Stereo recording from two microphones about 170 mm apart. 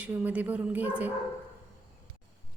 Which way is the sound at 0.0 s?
10° right (ahead or behind).